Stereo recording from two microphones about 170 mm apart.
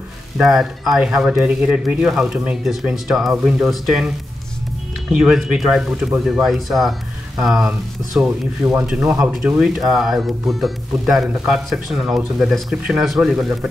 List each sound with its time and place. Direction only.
0.4 s speech: centre (ahead or behind)
5.1 s speech: 5° right (ahead or behind)